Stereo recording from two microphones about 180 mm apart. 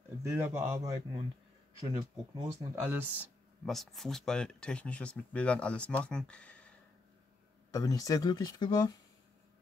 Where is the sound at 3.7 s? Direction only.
Centre (ahead or behind).